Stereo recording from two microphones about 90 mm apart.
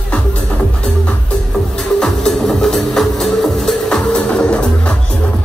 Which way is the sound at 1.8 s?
5° left (ahead or behind).